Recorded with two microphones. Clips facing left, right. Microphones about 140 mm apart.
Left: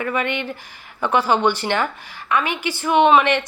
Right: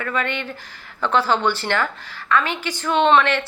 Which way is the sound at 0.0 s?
15° left (ahead or behind).